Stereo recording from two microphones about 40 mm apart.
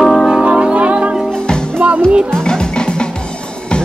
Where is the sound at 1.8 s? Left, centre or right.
Right.